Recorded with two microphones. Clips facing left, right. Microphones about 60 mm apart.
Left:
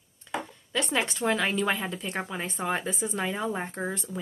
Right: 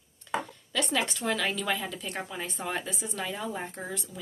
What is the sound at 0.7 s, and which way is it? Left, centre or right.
A woman's voice, left.